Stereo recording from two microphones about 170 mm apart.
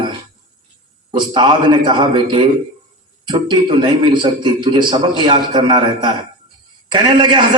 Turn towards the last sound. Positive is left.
turn(degrees=-25)  # may be behind; listen again after turning